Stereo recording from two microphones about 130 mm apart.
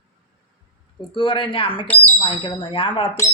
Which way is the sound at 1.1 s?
40° left (ahead or behind).